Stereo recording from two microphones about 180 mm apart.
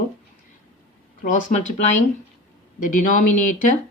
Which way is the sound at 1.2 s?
45° left (ahead or behind).